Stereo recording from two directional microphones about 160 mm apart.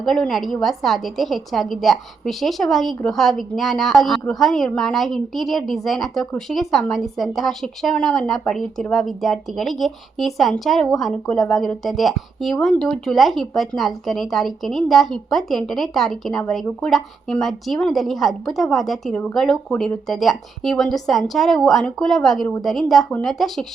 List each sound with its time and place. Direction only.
0.0 s a woman's voice: centre (ahead or behind)